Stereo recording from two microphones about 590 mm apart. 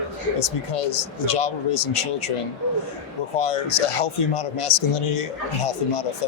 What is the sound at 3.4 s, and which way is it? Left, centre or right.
Speech, left.